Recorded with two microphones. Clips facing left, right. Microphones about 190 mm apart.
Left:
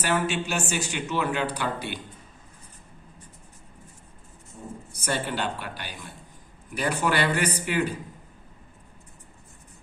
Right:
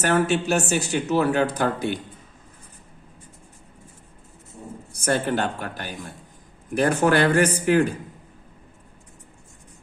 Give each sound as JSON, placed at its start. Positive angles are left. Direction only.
{"t": 0.0, "sound": "speech", "side_deg": -45}
{"t": 5.0, "sound": "speech", "side_deg": -50}